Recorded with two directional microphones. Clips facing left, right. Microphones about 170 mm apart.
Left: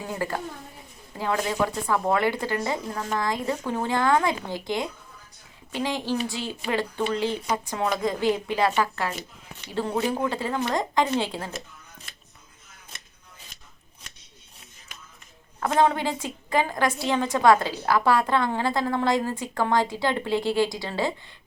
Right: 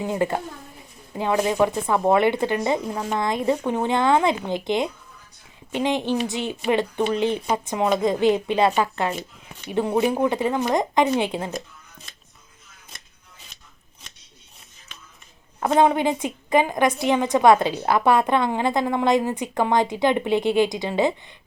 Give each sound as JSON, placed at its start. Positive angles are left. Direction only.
{"t": 0.0, "sound": "a woman's voice", "side_deg": -20}
{"t": 15.8, "sound": "a woman's voice", "side_deg": -20}